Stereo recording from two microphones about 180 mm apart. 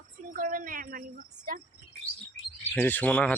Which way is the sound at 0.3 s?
50° right (ahead or behind).